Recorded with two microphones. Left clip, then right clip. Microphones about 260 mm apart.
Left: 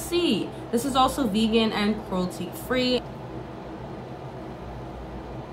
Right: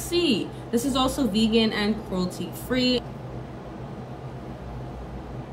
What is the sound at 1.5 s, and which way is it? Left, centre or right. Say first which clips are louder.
A woman's voice: even; centre.